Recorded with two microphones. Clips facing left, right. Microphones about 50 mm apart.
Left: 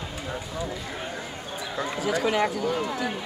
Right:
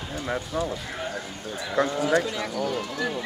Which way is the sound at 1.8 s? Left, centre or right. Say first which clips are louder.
Right 5 dB; right.